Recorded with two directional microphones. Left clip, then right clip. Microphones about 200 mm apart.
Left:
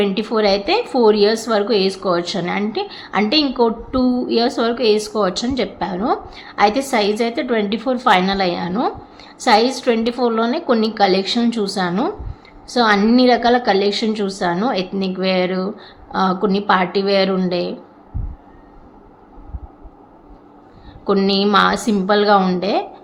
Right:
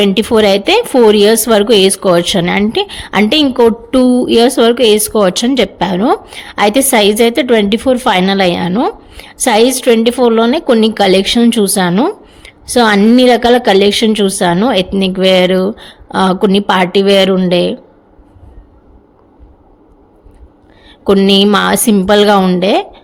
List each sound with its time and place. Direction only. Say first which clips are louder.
0.0 s a woman's voice: right 8 dB; 50° right (ahead or behind)
21.0 s a woman's voice: right 8 dB; 45° right (ahead or behind)